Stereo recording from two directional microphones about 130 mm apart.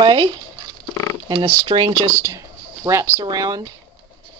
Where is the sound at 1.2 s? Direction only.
35° right (ahead or behind).